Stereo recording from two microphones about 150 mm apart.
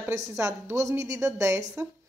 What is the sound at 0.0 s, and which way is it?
A woman's voice, 20° right (ahead or behind).